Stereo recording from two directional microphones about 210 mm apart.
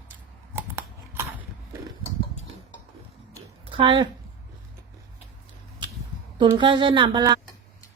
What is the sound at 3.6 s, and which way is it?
Speech, 25° right (ahead or behind).